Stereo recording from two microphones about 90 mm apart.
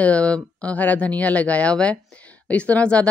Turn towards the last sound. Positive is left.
turn(degrees=15)  # may be behind; listen again after turning